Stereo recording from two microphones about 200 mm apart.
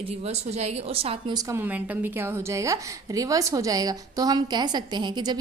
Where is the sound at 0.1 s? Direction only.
30° right (ahead or behind).